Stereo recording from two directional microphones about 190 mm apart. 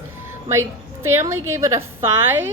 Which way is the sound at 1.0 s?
15° right (ahead or behind).